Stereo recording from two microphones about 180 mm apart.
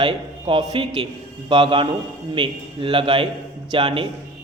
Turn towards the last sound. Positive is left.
turn(degrees=-30)  # may be behind; listen again after turning